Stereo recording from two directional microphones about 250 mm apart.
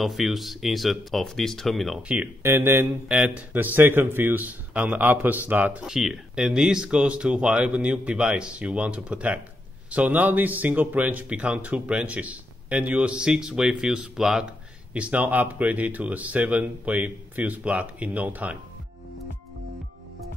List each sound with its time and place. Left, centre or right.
0.0 s speech: centre